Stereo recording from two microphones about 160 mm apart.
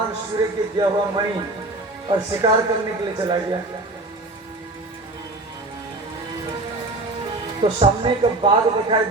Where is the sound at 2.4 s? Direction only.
30° right (ahead or behind).